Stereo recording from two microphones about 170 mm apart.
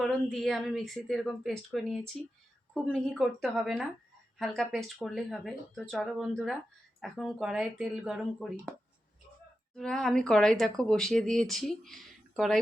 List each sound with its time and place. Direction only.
0.0 s speech: centre (ahead or behind)
9.7 s speech: 5° left (ahead or behind)